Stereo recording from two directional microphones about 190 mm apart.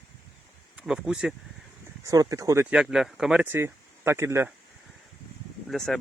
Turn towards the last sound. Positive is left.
turn(degrees=0)  # may be behind; listen again after turning